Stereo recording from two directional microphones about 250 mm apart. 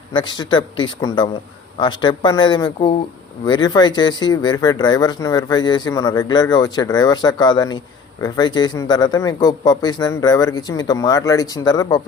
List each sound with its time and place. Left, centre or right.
0.1 s speech: centre